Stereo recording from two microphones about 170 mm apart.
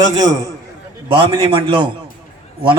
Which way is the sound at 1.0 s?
30° right (ahead or behind).